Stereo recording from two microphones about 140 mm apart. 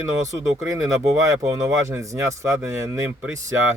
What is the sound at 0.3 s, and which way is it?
Speech, 25° right (ahead or behind).